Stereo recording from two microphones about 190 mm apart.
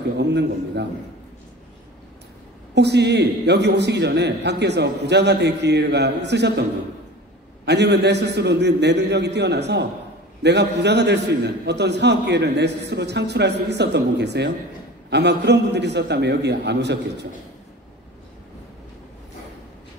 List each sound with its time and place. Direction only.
0.2 s a man's voice: 65° right (ahead or behind)
2.7 s a man's voice: 65° right (ahead or behind)
7.6 s a man's voice: 65° right (ahead or behind)